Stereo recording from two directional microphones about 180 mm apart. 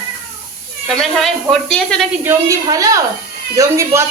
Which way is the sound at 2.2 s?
20° right (ahead or behind).